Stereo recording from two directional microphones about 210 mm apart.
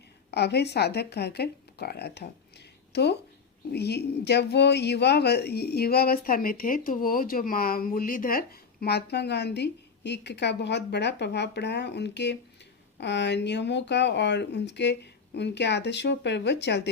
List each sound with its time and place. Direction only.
0.3 s speech: 50° left (ahead or behind)